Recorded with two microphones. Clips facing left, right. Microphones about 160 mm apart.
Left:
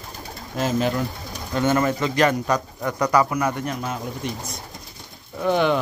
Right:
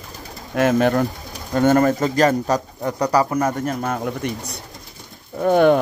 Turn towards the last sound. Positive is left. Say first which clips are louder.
# right 6 dB
turn(degrees=-45)  # may be behind; listen again after turning